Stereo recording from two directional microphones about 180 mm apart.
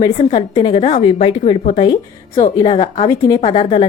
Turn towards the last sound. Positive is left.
turn(degrees=30)  # may be behind; listen again after turning